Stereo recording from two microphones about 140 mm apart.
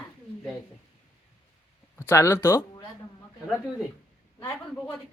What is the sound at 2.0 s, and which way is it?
Speech, 20° left (ahead or behind).